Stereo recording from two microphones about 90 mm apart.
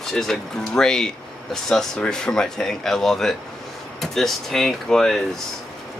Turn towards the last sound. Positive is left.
turn(degrees=5)  # may be behind; listen again after turning